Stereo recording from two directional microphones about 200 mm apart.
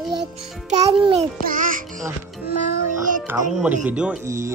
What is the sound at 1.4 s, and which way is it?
Speech, 45° right (ahead or behind).